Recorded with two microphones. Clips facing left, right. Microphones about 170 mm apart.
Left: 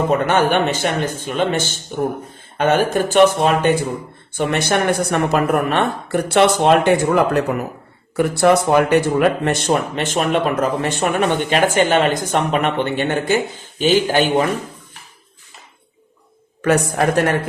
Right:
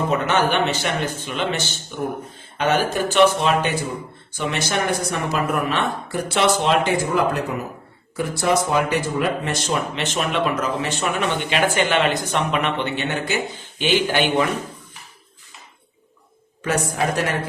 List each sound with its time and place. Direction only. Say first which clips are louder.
0.1 s speech: left 3 dB; 50° left (ahead or behind)
16.6 s speech: left 6 dB; 60° left (ahead or behind)